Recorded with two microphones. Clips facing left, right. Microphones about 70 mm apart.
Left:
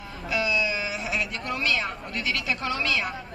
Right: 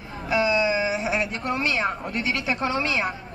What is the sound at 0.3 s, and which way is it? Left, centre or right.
Speech, right.